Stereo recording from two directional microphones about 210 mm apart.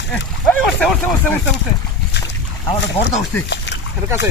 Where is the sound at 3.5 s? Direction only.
55° left (ahead or behind).